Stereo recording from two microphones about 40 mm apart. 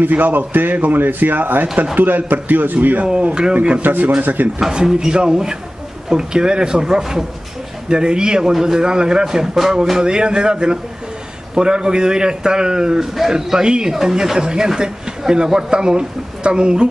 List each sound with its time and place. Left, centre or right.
0.0 s a man's voice: right
4.7 s a man's voice: centre
13.0 s a man's voice: centre; by 16.9 s right